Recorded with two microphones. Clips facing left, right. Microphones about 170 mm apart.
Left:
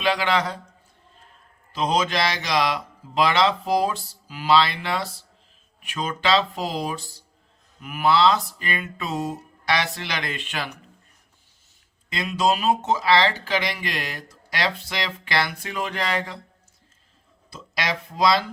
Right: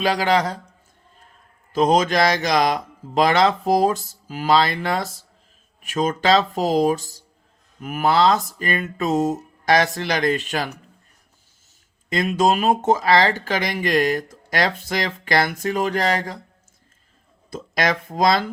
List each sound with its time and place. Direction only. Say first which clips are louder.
0.0 s a man's voice: right 3 dB; 40° right (ahead or behind)
1.7 s speech: right 6 dB; 45° right (ahead or behind)
12.0 s speech: right 4 dB; 45° right (ahead or behind)
17.5 s speech: right 6 dB; 50° right (ahead or behind)